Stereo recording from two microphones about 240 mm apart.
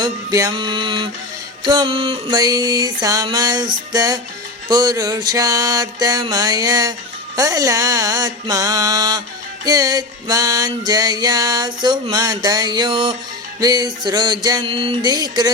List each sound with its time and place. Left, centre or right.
0.0 s music: centre